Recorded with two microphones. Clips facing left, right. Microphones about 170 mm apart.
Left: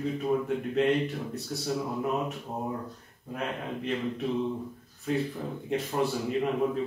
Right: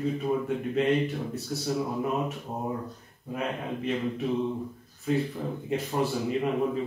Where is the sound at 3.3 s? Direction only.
Centre (ahead or behind).